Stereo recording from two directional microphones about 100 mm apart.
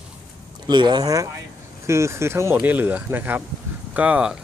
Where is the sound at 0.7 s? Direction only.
45° right (ahead or behind); by 4.4 s 10° right (ahead or behind).